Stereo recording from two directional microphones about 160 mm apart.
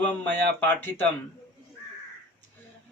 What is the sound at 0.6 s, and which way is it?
Speech, 10° left (ahead or behind).